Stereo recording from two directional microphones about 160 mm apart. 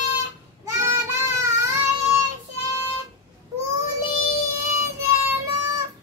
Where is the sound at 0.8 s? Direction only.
15° right (ahead or behind).